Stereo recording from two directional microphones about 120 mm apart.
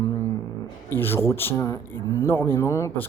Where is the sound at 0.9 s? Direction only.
20° left (ahead or behind).